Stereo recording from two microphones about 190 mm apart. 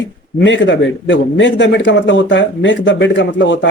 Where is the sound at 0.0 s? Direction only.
75° left (ahead or behind).